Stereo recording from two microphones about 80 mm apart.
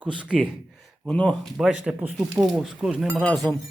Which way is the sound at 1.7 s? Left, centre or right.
Centre.